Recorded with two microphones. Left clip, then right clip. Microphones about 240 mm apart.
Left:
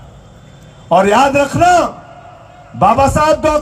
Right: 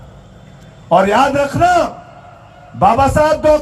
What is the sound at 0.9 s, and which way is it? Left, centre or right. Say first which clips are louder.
A man's voice: left 1 dB; left.